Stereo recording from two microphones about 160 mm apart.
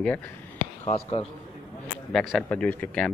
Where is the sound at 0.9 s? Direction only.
40° left (ahead or behind).